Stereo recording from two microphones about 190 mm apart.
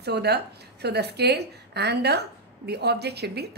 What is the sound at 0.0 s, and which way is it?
A woman's voice, 60° right (ahead or behind).